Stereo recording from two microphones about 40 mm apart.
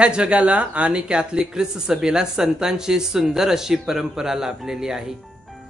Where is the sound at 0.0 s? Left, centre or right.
Right.